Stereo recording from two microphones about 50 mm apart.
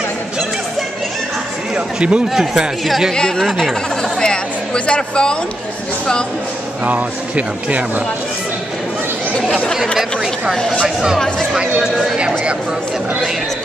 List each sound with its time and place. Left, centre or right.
2.0 s speech: centre
2.2 s a man's voice: centre
3.1 s speech: centre
4.2 s a sound: centre
6.8 s speech: right
11.1 s speech: centre